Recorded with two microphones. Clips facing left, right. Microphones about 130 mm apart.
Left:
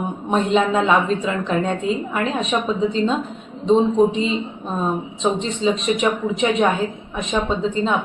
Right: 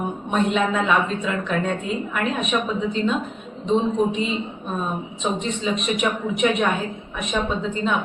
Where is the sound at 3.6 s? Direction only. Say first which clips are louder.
Left 5 dB; 30° left (ahead or behind).